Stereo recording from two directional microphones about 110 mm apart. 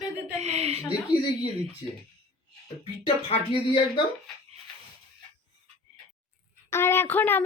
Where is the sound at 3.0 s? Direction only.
90° left.